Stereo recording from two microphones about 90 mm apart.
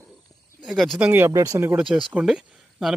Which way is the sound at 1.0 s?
20° right (ahead or behind).